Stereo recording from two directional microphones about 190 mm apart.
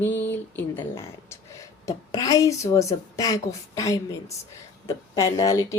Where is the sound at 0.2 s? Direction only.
10° left (ahead or behind).